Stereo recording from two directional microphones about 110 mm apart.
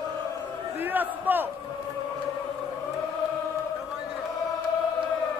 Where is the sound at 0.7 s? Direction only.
15° right (ahead or behind).